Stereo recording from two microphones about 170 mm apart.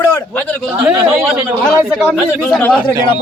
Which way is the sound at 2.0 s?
5° left (ahead or behind).